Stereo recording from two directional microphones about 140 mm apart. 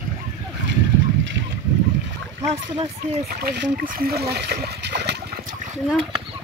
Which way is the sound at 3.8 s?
90° right.